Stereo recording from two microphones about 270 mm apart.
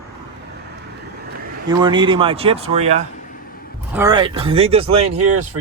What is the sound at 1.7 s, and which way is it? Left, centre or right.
Speech, centre.